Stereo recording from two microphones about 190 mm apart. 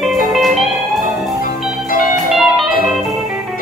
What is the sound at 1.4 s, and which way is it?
Music, 45° left (ahead or behind).